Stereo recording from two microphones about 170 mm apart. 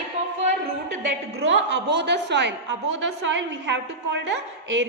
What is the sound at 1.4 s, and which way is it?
A woman's voice, 90° right.